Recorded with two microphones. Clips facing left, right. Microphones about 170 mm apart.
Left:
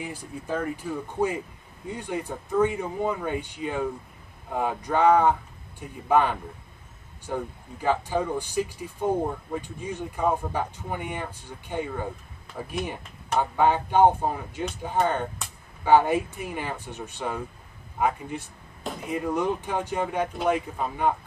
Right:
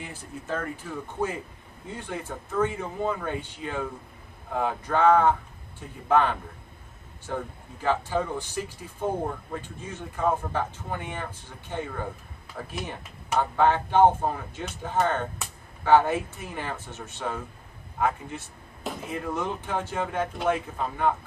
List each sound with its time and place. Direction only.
0.0 s speech: 10° left (ahead or behind)
7.3 s speech: 10° left (ahead or behind)